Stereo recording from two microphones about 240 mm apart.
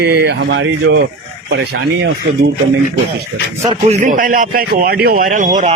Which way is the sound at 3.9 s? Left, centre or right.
Right.